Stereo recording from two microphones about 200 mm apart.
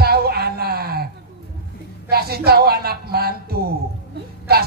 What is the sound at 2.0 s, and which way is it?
A man's voice, 50° right (ahead or behind).